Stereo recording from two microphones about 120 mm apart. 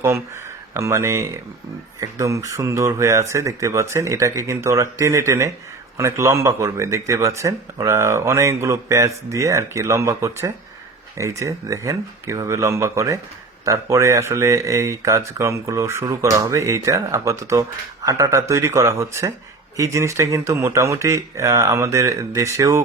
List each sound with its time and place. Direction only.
0.7 s speech: 25° right (ahead or behind)